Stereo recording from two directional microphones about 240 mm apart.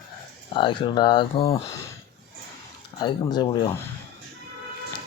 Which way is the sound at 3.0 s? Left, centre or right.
Centre.